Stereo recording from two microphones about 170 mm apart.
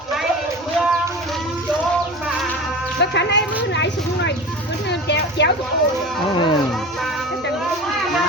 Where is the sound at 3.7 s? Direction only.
90° left.